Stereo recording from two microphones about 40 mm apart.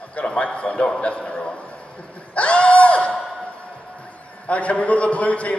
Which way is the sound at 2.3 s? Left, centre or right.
Left.